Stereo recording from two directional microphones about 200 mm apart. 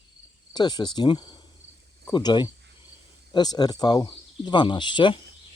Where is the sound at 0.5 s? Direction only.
20° left (ahead or behind).